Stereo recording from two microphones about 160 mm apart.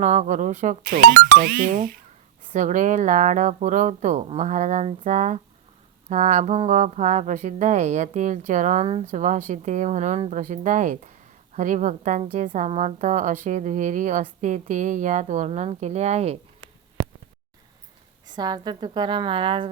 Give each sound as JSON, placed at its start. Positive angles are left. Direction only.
{"t": 0.0, "sound": "speech", "side_deg": -50}
{"t": 0.9, "sound": "speech", "side_deg": -70}
{"t": 18.3, "sound": "a woman's voice", "side_deg": -25}